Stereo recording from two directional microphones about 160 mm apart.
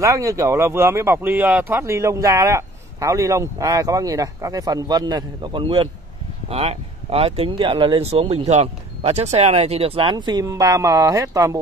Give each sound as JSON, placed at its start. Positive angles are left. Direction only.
{"t": 0.0, "sound": "speech", "side_deg": -20}